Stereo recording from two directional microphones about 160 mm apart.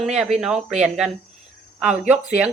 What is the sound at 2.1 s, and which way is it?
Speech, 5° right (ahead or behind).